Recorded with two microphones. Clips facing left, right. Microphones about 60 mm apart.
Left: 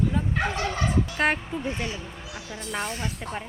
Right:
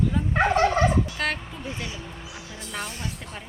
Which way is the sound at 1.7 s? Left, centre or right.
Left.